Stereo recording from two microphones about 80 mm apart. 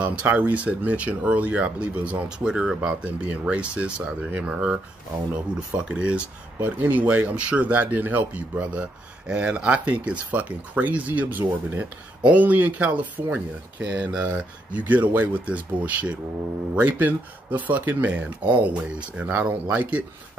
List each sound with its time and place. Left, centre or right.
0.0 s speech: centre
5.8 s speech: centre